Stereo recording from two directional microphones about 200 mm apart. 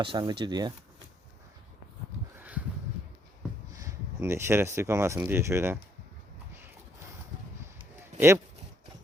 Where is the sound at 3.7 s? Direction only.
15° right (ahead or behind).